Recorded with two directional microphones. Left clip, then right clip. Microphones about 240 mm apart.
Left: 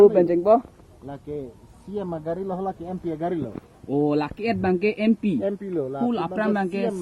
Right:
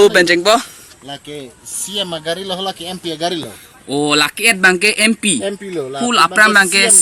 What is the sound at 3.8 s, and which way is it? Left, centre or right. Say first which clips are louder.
Speech: right 5 dB; right.